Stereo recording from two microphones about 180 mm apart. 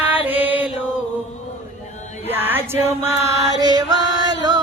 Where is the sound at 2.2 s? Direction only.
10° right (ahead or behind).